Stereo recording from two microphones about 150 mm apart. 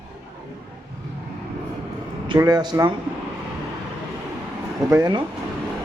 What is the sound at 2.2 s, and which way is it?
Speech, 30° right (ahead or behind).